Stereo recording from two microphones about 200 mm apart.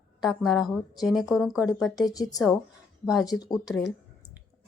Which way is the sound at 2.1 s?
20° left (ahead or behind).